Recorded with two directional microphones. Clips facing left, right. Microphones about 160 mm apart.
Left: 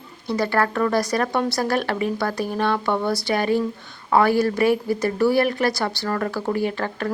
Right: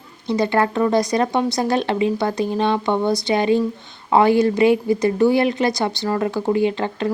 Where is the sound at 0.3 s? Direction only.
20° right (ahead or behind).